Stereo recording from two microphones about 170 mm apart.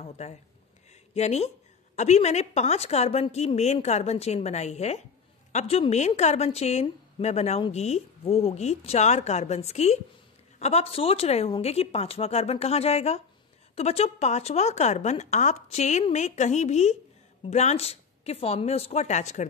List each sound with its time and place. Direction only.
0.0 s a woman's voice: 40° left (ahead or behind)